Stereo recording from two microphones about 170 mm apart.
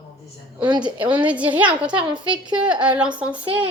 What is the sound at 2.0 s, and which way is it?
Speech, 30° right (ahead or behind).